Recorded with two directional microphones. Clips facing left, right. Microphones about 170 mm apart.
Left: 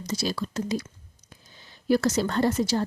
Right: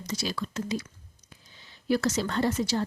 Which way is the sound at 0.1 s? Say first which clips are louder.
Left 3 dB; 35° left (ahead or behind).